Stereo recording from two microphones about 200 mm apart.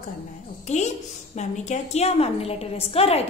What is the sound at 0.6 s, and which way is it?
A woman's voice, 35° left (ahead or behind).